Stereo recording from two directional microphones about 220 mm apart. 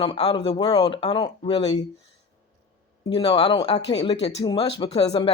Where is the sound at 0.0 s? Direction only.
25° left (ahead or behind).